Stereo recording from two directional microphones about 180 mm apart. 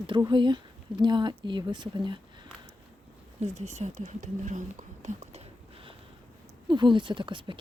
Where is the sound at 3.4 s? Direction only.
40° right (ahead or behind).